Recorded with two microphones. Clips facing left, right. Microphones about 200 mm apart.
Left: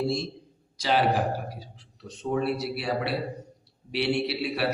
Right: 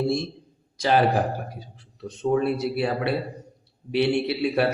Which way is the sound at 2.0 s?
55° right (ahead or behind).